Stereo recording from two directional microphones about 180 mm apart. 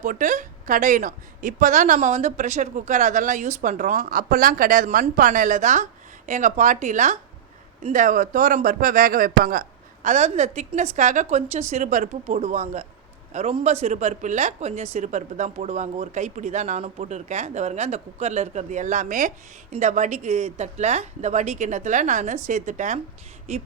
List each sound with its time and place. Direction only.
0.0 s a woman's voice: 45° right (ahead or behind)